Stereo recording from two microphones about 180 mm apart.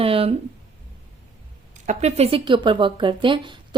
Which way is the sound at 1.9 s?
40° right (ahead or behind).